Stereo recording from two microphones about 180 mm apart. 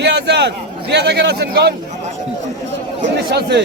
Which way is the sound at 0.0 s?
70° right (ahead or behind).